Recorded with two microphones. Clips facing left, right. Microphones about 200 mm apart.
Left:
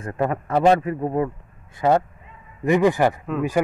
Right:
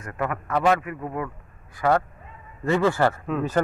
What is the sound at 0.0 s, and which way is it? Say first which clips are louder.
A man's voice: left 5 dB; 30° left (ahead or behind).